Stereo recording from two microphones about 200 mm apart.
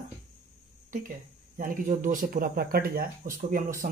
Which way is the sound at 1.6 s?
45° right (ahead or behind).